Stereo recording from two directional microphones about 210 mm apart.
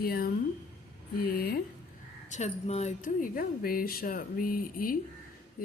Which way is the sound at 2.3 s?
30° left (ahead or behind).